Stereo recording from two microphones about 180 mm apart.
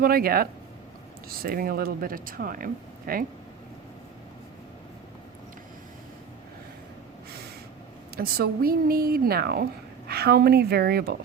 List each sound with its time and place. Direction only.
0.0 s a woman's voice: 55° right (ahead or behind)
8.1 s a woman's voice: 55° right (ahead or behind)